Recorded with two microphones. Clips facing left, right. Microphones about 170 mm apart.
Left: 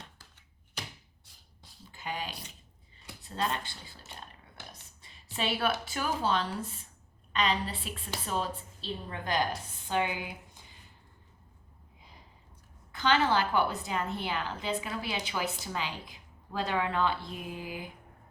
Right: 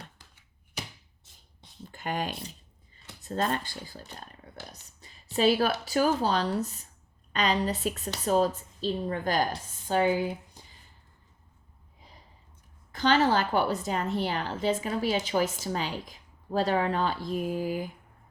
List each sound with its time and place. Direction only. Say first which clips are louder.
1.8 s a sound: right 6 dB; 50° right (ahead or behind)
3.2 s a woman's voice: right 4 dB; 45° right (ahead or behind)
4.7 s a woman's voice: right 2 dB; 40° right (ahead or behind)
12.9 s a woman's voice: right 3 dB; 40° right (ahead or behind)